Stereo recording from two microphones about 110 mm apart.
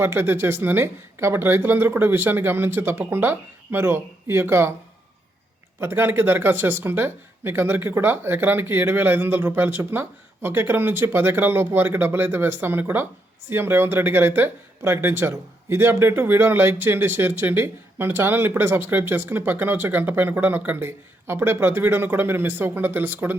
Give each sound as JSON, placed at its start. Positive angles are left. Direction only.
{"t": 0.0, "sound": "speech", "side_deg": -20}
{"t": 5.8, "sound": "speech", "side_deg": -20}